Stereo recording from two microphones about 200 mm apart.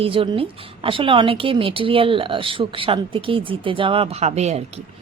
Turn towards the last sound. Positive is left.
turn(degrees=-35)  # may be behind; listen again after turning